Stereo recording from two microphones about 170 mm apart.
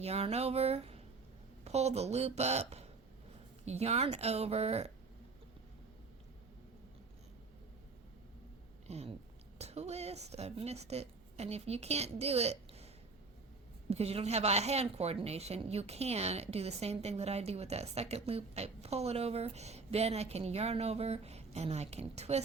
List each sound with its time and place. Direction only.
0.0 s a woman's voice: 40° right (ahead or behind)
8.9 s a woman's voice: 40° right (ahead or behind)
13.9 s a woman's voice: 35° right (ahead or behind)